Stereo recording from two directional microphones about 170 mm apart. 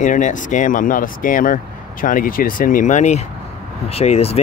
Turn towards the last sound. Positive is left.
turn(degrees=35)  # may be behind; listen again after turning